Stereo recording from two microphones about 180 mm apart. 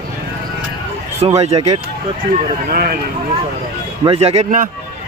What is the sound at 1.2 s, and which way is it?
Speech, 30° right (ahead or behind).